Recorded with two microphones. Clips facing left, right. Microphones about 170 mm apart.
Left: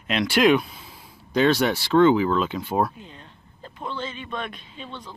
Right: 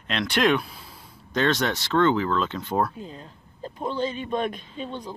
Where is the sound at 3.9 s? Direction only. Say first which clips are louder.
Right 5 dB; 40° right (ahead or behind).